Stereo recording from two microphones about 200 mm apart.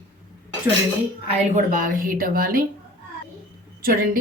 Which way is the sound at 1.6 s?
40° right (ahead or behind).